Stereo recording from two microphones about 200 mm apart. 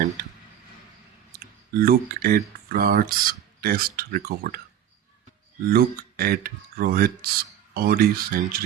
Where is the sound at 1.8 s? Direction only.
50° right (ahead or behind).